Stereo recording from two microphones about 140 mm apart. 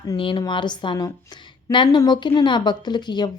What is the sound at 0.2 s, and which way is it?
A woman's voice, 35° left (ahead or behind).